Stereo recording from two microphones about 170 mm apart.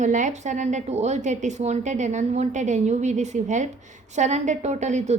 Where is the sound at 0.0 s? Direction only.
45° right (ahead or behind).